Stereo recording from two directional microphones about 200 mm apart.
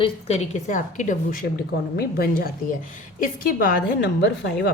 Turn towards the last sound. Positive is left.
turn(degrees=55)  # may be behind; listen again after turning